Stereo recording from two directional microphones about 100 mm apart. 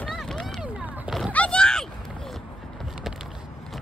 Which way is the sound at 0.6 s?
10° right (ahead or behind).